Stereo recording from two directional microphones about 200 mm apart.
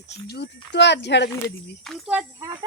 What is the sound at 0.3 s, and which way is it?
Speech, 55° left (ahead or behind).